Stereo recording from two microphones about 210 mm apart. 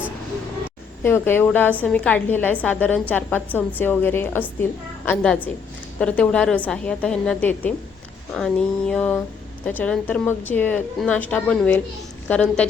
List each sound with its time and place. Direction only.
1.0 s a woman's voice: 10° left (ahead or behind)